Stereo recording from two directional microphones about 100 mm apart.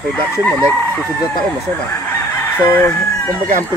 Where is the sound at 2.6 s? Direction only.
20° left (ahead or behind).